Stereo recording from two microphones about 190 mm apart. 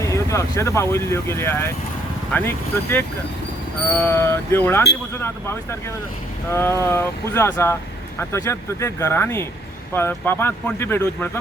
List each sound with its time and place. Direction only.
0.0 s speech: 15° left (ahead or behind)
6.5 s speech: 15° left (ahead or behind)